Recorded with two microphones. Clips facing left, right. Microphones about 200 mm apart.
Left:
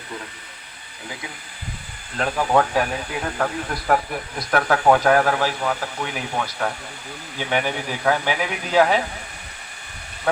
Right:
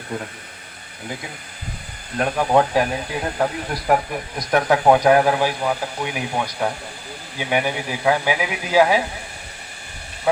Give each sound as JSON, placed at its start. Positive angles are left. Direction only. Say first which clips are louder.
{"t": 2.1, "sound": "speech", "louder": "right 2 dB", "side_deg": -15}